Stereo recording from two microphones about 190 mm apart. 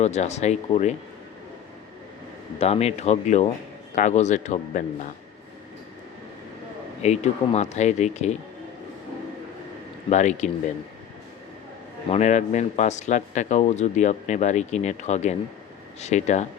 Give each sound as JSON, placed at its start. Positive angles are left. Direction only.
{"t": 0.0, "sound": "speech", "side_deg": 35}
{"t": 2.6, "sound": "speech", "side_deg": 35}
{"t": 7.0, "sound": "speech", "side_deg": 35}
{"t": 10.1, "sound": "speech", "side_deg": 40}
{"t": 12.1, "sound": "speech", "side_deg": 35}